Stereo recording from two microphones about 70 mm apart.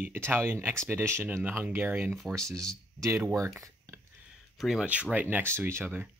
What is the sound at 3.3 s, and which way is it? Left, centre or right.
Speech, right.